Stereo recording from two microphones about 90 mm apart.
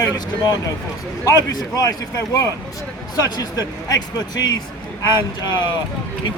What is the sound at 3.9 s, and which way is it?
Speech, 50° left (ahead or behind).